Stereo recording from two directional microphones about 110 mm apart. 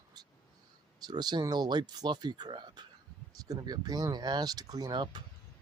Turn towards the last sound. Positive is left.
turn(degrees=-40)  # may be behind; listen again after turning